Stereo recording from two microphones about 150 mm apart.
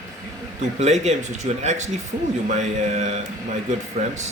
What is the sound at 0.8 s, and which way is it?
Speech, 50° right (ahead or behind).